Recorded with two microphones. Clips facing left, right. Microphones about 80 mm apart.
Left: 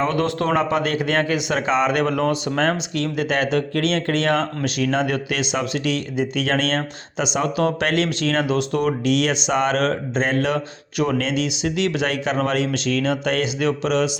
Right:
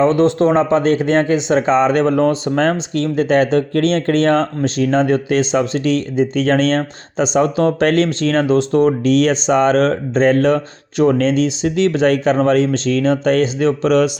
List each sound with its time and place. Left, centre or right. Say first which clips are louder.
0.0 s speech: right 8 dB; right